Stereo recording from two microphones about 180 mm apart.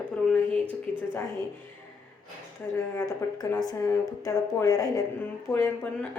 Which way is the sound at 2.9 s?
15° left (ahead or behind).